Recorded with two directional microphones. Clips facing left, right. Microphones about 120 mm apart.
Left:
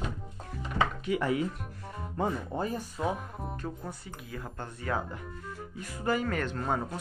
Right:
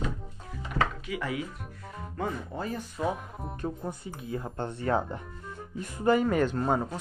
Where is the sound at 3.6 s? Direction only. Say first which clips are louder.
Right 4 dB; 20° right (ahead or behind).